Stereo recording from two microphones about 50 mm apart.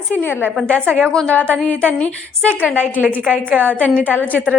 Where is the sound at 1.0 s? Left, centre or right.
Centre.